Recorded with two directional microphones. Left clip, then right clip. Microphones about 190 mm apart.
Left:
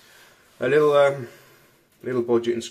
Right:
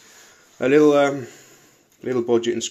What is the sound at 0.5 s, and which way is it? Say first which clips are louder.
Speech: right 2 dB; 35° right (ahead or behind).